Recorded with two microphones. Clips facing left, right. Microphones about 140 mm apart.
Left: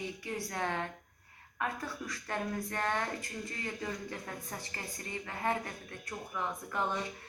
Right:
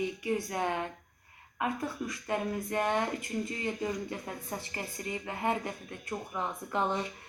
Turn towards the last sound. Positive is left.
turn(degrees=-20)  # may be behind; listen again after turning